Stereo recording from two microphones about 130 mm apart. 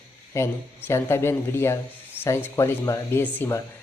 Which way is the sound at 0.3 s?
20° left (ahead or behind).